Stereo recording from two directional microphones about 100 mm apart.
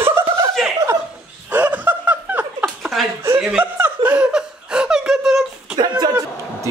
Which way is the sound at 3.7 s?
15° right (ahead or behind).